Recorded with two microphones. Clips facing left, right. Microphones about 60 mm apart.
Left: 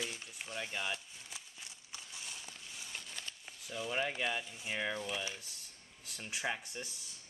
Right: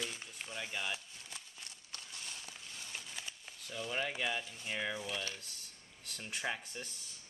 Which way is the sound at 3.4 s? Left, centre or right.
Centre.